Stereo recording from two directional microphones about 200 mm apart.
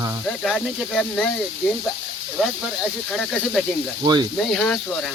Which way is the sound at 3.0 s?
Centre (ahead or behind).